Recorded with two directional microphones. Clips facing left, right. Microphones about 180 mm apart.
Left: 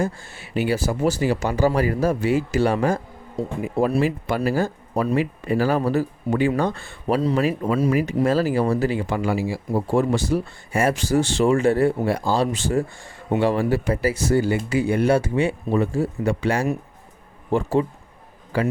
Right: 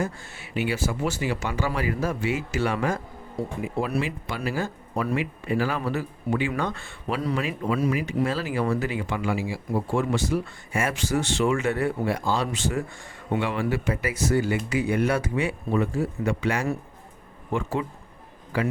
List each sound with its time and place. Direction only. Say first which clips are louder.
0.0 s speech: left 4 dB; 30° left (ahead or behind)
4.0 s speech: left 8 dB; 45° left (ahead or behind)